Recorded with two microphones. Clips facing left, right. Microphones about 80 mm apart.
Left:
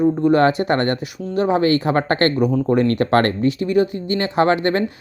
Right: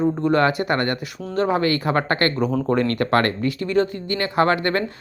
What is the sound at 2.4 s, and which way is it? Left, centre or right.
Speech, centre.